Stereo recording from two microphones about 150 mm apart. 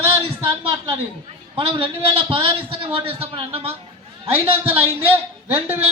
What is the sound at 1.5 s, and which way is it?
A man's voice, 35° right (ahead or behind).